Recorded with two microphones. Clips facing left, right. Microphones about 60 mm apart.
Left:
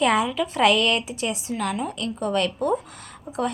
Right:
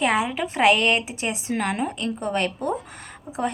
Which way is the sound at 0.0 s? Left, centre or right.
Centre.